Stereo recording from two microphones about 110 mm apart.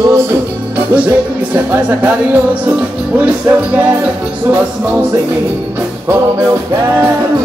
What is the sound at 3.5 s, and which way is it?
Music, 15° right (ahead or behind).